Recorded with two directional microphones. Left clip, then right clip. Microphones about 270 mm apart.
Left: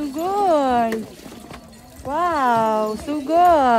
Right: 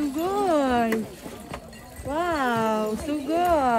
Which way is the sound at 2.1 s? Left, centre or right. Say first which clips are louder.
Left 6 dB; centre.